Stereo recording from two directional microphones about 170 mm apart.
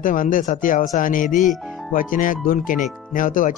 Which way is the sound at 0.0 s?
50° left (ahead or behind).